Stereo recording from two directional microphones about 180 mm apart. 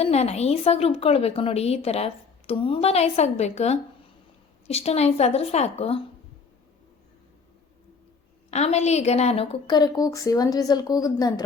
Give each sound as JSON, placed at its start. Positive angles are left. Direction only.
{"t": 0.0, "sound": "a woman's voice", "side_deg": 35}
{"t": 8.4, "sound": "a woman's voice", "side_deg": 35}